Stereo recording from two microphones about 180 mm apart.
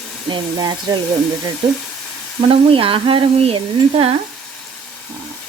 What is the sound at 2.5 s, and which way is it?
Speech, 30° right (ahead or behind).